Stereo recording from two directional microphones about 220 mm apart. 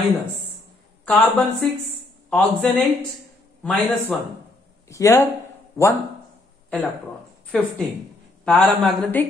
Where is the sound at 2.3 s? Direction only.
5° left (ahead or behind).